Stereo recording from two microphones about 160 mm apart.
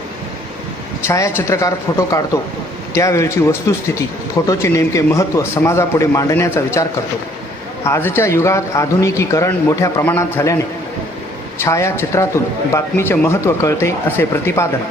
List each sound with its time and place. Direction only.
1.0 s a man's voice: 20° left (ahead or behind)
7.9 s a man's voice: 15° left (ahead or behind)
11.6 s a man's voice: 15° left (ahead or behind)